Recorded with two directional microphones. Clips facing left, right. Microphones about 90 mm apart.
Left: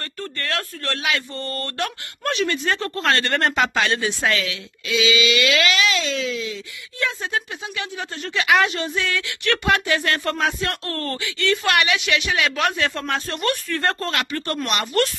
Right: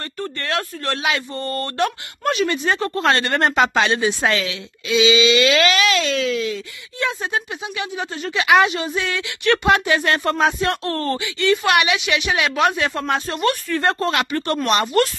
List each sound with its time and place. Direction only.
0.2 s speech: 20° right (ahead or behind); by 5.9 s 40° right (ahead or behind)
5.9 s speech: 60° right (ahead or behind)
7.0 s a woman's voice: 20° right (ahead or behind); by 13.9 s 5° right (ahead or behind)
13.9 s speech: 20° right (ahead or behind)